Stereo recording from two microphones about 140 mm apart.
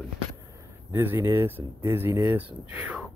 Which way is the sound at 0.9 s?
15° right (ahead or behind).